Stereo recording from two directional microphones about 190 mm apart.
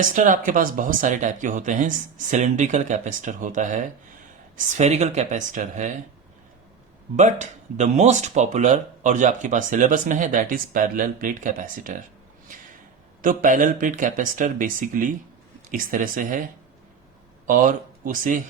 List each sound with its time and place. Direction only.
0.0 s speech: 45° right (ahead or behind)
7.2 s speech: 40° right (ahead or behind)
13.2 s speech: 45° right (ahead or behind)
17.4 s speech: 45° right (ahead or behind)